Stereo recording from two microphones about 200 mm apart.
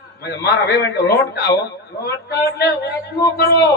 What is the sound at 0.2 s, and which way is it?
A man's voice, 55° left (ahead or behind).